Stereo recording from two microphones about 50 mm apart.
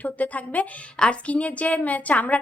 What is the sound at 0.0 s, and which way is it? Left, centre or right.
Speech, left.